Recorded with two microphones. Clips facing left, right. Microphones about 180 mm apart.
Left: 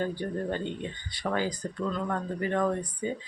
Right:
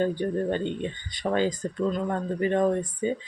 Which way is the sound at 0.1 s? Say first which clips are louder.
Right 5 dB; 20° right (ahead or behind).